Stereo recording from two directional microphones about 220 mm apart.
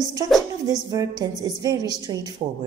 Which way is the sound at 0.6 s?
15° right (ahead or behind).